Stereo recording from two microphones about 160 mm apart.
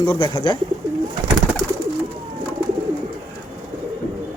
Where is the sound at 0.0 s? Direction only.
30° left (ahead or behind).